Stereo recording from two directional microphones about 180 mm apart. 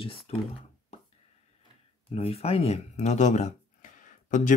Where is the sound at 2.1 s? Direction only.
35° left (ahead or behind).